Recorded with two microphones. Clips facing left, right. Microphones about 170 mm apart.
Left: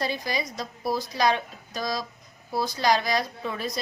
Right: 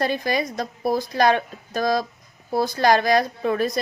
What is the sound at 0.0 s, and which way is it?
A woman's voice, 55° right (ahead or behind).